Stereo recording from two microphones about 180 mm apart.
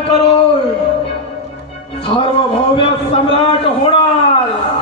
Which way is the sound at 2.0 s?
30° left (ahead or behind).